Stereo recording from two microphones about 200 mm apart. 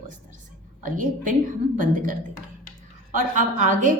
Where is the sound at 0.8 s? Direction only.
40° right (ahead or behind).